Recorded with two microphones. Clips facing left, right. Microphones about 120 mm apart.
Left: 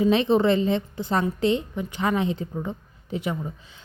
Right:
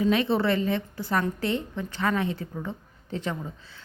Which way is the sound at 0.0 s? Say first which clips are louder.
Left 4 dB; 20° left (ahead or behind).